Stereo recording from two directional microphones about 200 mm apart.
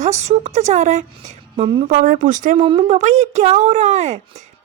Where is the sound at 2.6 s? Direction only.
25° right (ahead or behind).